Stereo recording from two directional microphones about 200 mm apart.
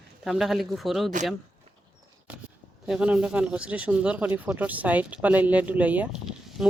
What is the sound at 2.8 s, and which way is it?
Speech, 5° right (ahead or behind).